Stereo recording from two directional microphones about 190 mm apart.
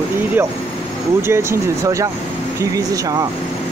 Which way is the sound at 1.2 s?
15° right (ahead or behind).